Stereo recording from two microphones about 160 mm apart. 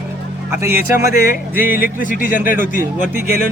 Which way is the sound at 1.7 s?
60° left (ahead or behind).